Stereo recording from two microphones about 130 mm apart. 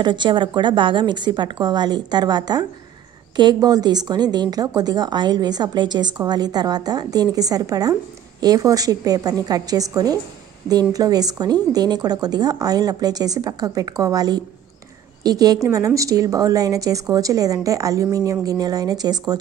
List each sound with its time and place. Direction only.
0.0 s a woman's voice: 35° right (ahead or behind)